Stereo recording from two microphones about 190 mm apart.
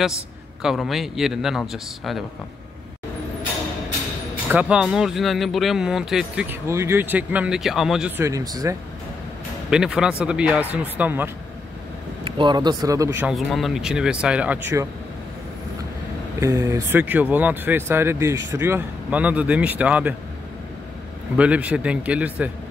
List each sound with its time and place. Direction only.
0.6 s speech: centre (ahead or behind)
4.5 s speech: 5° right (ahead or behind)
8.2 s speech: 15° right (ahead or behind)
9.7 s speech: 5° right (ahead or behind)
12.3 s speech: 25° right (ahead or behind)
13.3 s speech: centre (ahead or behind)
16.3 s speech: 15° right (ahead or behind)
21.4 s speech: 5° right (ahead or behind)